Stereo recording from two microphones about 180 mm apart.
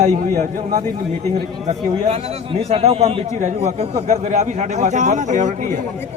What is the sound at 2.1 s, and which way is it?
A man's voice, 35° right (ahead or behind).